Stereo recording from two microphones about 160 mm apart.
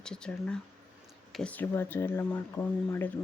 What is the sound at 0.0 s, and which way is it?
Speech, 5° left (ahead or behind).